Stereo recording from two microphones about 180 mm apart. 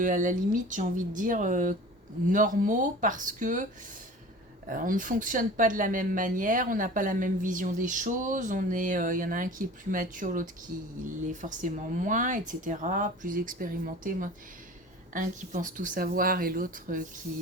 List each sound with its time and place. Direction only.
0.0 s speech: 45° right (ahead or behind)
4.7 s speech: 50° right (ahead or behind)